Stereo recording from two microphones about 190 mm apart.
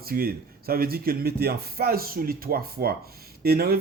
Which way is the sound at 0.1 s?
50° right (ahead or behind).